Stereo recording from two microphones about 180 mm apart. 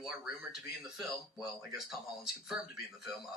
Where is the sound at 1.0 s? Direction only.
Centre (ahead or behind).